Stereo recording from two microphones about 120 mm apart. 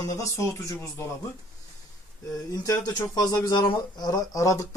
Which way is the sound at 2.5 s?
30° left (ahead or behind).